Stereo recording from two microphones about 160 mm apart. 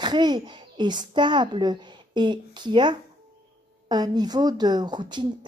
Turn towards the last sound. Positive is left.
turn(degrees=-25)  # may be behind; listen again after turning